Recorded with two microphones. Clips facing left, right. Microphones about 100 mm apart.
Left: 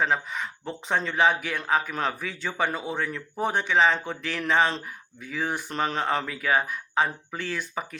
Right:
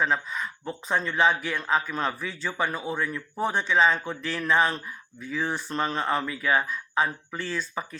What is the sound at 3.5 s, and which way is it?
Speech, 60° left (ahead or behind).